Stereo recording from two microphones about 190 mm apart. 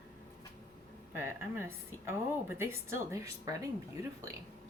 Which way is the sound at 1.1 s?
10° right (ahead or behind).